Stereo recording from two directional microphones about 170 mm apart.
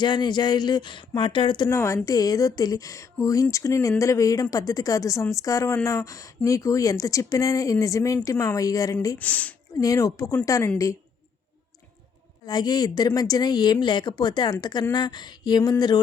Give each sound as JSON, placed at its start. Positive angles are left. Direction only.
{"t": 0.0, "sound": "a woman's voice", "side_deg": 25}
{"t": 9.1, "sound": "speech", "side_deg": 10}
{"t": 9.8, "sound": "a woman's voice", "side_deg": 20}
{"t": 12.5, "sound": "a woman's voice", "side_deg": 25}